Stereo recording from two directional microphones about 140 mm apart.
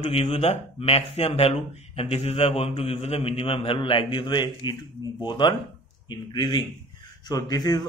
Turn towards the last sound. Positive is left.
turn(degrees=30)  # may be behind; listen again after turning